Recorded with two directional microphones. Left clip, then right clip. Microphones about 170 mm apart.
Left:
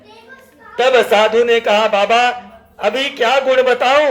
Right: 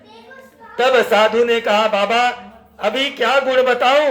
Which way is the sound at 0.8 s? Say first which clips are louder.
Left 2 dB; 25° left (ahead or behind).